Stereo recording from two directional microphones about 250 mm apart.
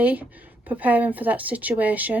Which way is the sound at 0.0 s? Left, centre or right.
Centre.